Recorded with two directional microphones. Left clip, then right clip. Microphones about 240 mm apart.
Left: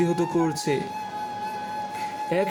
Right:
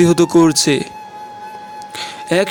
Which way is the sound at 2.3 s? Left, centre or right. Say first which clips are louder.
Right 10 dB; right.